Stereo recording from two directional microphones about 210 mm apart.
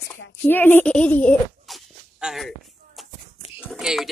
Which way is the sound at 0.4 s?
10° left (ahead or behind).